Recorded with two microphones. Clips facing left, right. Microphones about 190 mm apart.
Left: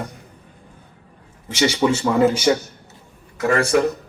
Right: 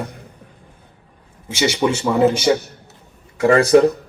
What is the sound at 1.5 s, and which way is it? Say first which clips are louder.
Speech: even; 10° right (ahead or behind).